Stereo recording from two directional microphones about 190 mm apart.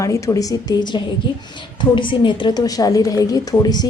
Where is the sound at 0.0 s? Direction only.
15° left (ahead or behind).